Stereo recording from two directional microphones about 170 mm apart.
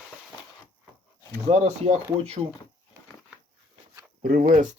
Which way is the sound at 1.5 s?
40° right (ahead or behind).